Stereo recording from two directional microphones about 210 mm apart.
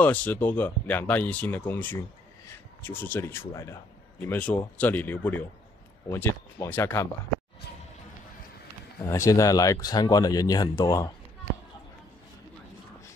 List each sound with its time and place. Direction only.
0.0 s speech: 10° left (ahead or behind)
9.0 s speech: 15° left (ahead or behind)